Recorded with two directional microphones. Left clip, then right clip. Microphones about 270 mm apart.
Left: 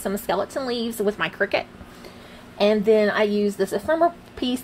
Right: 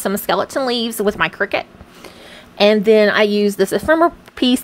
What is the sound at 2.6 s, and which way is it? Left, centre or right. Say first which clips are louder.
Speech: right 6 dB; right.